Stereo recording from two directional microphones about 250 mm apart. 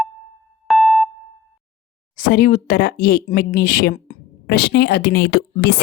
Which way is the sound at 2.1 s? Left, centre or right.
Left.